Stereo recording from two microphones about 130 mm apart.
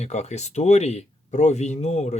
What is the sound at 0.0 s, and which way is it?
Speech, 60° left (ahead or behind).